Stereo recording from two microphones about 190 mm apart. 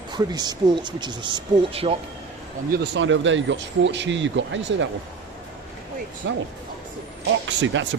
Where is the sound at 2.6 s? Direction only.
55° right (ahead or behind); by 4.9 s 75° right (ahead or behind).